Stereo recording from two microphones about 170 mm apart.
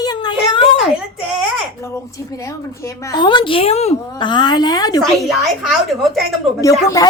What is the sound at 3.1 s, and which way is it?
A woman's voice, 25° left (ahead or behind).